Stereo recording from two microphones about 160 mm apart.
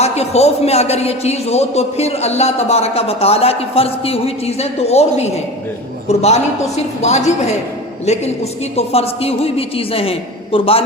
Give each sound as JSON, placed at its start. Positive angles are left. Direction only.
{"t": 0.0, "sound": "a man's voice", "side_deg": 40}